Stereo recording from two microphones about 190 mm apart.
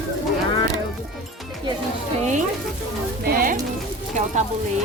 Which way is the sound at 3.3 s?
45° right (ahead or behind).